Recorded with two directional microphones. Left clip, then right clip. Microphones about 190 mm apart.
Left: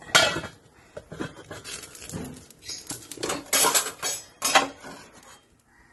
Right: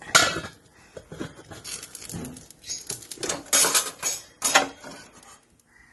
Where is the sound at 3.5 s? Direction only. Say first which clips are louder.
Even; 20° left (ahead or behind).